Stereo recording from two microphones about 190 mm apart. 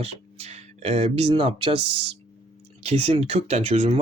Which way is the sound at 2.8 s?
35° right (ahead or behind).